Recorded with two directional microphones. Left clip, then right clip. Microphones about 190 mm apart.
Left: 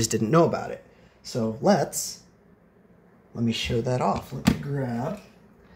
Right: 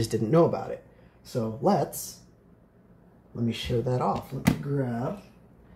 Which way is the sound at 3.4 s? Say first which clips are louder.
Left 2 dB; 20° left (ahead or behind).